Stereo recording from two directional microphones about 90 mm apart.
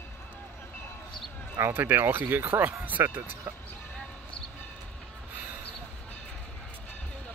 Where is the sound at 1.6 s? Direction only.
25° right (ahead or behind).